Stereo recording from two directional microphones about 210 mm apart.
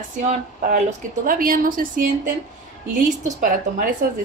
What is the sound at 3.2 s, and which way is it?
Speech, 40° right (ahead or behind).